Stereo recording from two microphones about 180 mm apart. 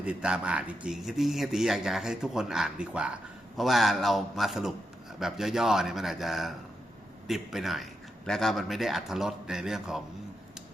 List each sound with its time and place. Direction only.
0.0 s speech: 5° right (ahead or behind)